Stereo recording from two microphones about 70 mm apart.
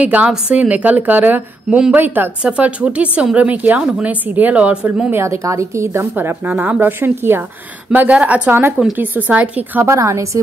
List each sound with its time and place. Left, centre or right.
0.0 s a woman's voice: right
2.4 s a woman's voice: centre
5.1 s a woman's voice: right
6.1 s a woman's voice: right
7.9 s a woman's voice: right
9.9 s a woman's voice: right